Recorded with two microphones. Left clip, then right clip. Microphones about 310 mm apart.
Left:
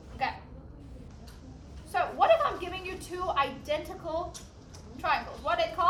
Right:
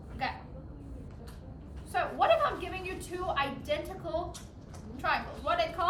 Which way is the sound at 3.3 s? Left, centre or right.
Left.